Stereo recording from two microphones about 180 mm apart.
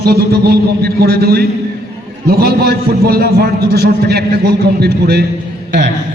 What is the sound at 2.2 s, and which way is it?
A man's voice, 60° right (ahead or behind).